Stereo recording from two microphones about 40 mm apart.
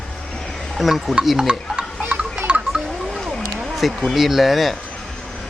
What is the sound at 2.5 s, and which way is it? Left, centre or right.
Wind chime, right.